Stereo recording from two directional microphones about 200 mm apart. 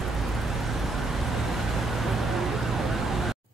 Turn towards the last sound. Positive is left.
turn(degrees=0)  # may be behind; listen again after turning